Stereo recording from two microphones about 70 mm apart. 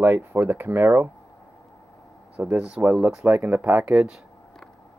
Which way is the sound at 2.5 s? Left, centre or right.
Centre.